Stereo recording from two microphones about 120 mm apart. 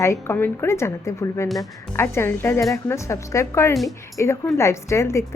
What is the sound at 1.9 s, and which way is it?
A woman's voice, 20° left (ahead or behind).